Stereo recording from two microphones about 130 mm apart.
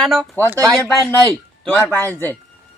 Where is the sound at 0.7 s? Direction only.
15° left (ahead or behind).